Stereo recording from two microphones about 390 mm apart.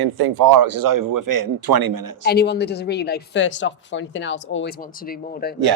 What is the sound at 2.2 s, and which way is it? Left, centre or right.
Speech, left.